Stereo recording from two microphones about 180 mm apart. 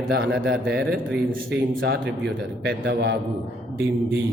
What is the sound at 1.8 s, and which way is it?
Speech, 75° right (ahead or behind).